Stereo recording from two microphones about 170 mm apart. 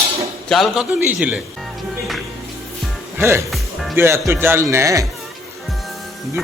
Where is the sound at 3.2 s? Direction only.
15° right (ahead or behind).